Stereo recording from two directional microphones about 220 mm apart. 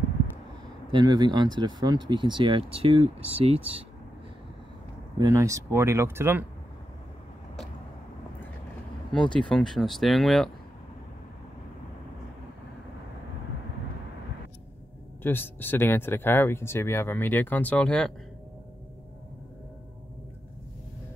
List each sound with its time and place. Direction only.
0.9 s speech: 20° right (ahead or behind)
5.2 s speech: 15° right (ahead or behind)
9.1 s speech: 5° left (ahead or behind)
15.2 s speech: 10° left (ahead or behind)